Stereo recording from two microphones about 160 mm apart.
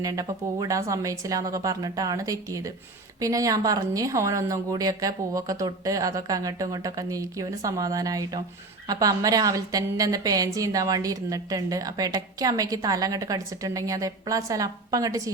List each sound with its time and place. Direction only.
0.0 s a woman's voice: 20° right (ahead or behind)